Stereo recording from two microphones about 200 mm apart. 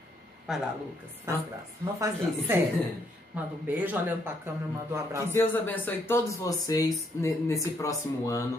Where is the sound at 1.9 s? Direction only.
15° right (ahead or behind).